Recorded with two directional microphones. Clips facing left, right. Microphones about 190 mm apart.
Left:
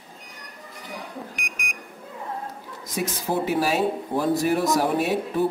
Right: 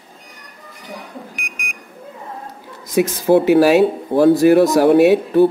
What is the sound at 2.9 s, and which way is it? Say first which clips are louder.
Speech: right 12 dB; 75° right (ahead or behind).